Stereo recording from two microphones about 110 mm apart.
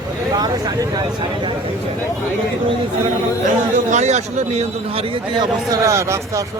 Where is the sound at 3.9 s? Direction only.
90° right.